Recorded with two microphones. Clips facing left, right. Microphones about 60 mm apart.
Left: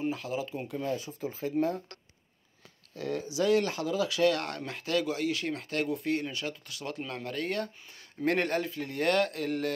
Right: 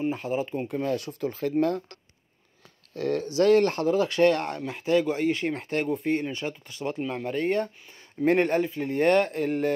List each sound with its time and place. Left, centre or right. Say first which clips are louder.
0.0 s speech: right 5 dB; right
0.8 s speech: right 5 dB; right
3.1 s speech: right 6 dB; right
4.4 s speech: right 5 dB; centre
5.0 s speech: right 5 dB; right